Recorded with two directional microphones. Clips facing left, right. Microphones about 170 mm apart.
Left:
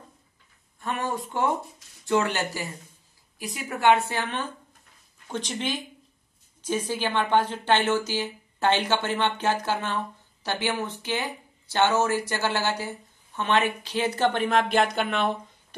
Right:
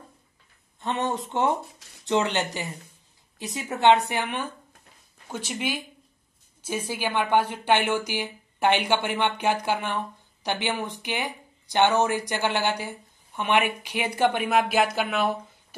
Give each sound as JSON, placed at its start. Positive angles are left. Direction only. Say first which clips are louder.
{"t": 0.7, "sound": "a woman's voice", "louder": "right 2 dB", "side_deg": -20}